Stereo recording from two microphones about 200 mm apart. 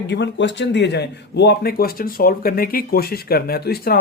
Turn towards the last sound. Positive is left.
turn(degrees=50)  # may be behind; listen again after turning